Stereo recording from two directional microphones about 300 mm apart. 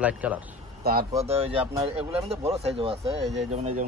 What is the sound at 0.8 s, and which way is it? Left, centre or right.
Speech, right.